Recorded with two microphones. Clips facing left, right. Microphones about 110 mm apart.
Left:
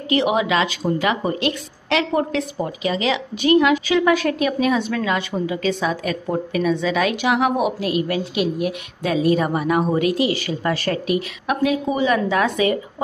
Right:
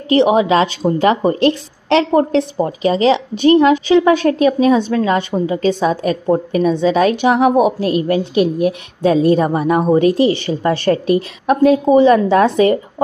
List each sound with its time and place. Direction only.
0.1 s a woman's voice: 35° right (ahead or behind)